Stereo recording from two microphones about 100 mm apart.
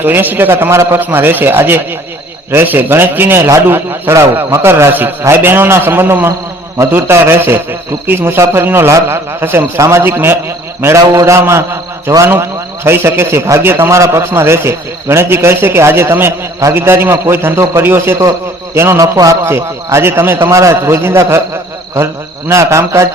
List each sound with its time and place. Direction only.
0.0 s a man's voice: 20° right (ahead or behind)
19.0 s a man's voice: 35° right (ahead or behind)